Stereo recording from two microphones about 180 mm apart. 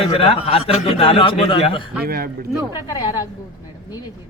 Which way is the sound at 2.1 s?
55° right (ahead or behind).